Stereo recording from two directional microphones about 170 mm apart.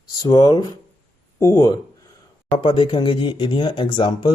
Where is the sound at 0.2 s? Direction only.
25° left (ahead or behind).